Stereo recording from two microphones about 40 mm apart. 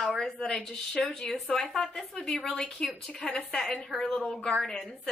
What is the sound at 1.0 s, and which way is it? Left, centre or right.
Speech, centre.